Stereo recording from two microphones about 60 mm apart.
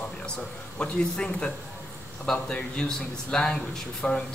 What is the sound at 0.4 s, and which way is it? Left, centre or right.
A man's voice, centre.